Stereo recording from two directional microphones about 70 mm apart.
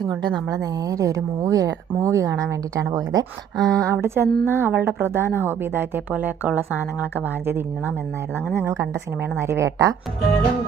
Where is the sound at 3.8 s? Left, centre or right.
Right.